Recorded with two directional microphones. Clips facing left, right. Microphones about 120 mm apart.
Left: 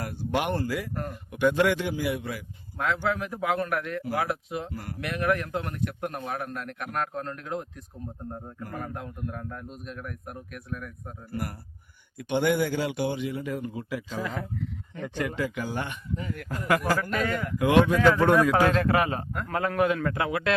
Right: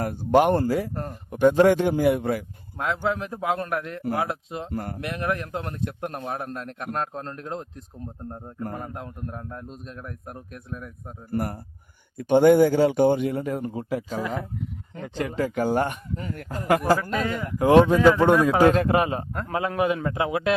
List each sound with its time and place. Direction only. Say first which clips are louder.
0.0 s a man's voice: right 9 dB; 45° right (ahead or behind)
2.7 s speech: right 1 dB; 20° right (ahead or behind)
4.7 s a man's voice: right 7 dB; 50° right (ahead or behind)
4.9 s speech: left 3 dB; 25° right (ahead or behind)
8.7 s speech: right 1 dB; 25° right (ahead or behind)
11.3 s a man's voice: right 7 dB; 45° right (ahead or behind)
15.0 s speech: right 3 dB; 30° right (ahead or behind)
15.4 s a man's voice: right 8 dB; 45° right (ahead or behind)
17.0 s a man's voice: right 1 dB; 10° right (ahead or behind)
17.6 s speech: right 5 dB; 35° right (ahead or behind)
17.9 s a man's voice: right 3 dB; 15° right (ahead or behind)